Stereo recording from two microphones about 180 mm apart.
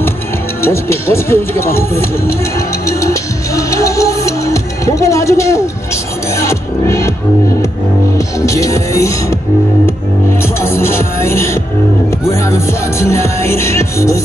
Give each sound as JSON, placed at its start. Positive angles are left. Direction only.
{"t": 0.6, "sound": "music", "side_deg": 15}
{"t": 8.4, "sound": "music", "side_deg": 15}
{"t": 10.6, "sound": "music", "side_deg": 15}